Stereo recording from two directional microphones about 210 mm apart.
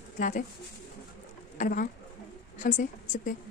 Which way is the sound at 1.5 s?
40° left (ahead or behind).